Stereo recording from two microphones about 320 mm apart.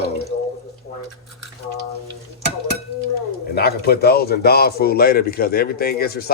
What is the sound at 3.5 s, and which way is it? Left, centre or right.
A man's voice, left.